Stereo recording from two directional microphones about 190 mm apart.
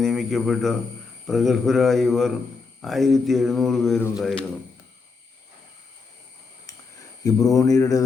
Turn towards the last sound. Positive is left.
turn(degrees=15)  # may be behind; listen again after turning